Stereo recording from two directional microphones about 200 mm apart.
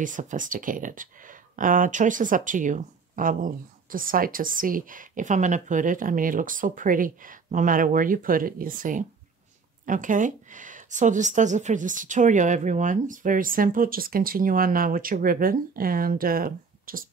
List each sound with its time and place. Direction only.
0.0 s speech: 40° right (ahead or behind)